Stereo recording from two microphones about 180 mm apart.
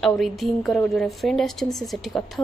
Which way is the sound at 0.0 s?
Centre (ahead or behind).